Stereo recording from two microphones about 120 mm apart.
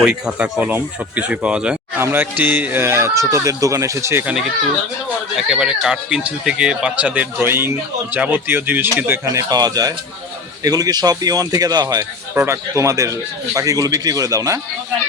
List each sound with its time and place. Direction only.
0.0 s speech: 5° right (ahead or behind); by 4.3 s 20° right (ahead or behind)
5.5 s speech: 5° right (ahead or behind)
9.2 s speech: 25° right (ahead or behind)
12.3 s speech: 20° right (ahead or behind)